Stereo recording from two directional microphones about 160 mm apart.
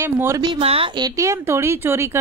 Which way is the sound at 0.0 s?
15° right (ahead or behind).